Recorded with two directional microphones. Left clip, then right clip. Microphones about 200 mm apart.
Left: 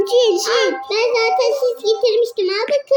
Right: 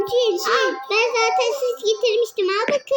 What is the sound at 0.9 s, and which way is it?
A child's voice, 40° right (ahead or behind).